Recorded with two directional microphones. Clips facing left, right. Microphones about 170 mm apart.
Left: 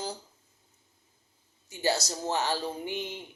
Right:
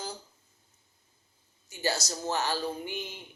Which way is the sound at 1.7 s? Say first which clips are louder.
Left 3 dB; 20° left (ahead or behind).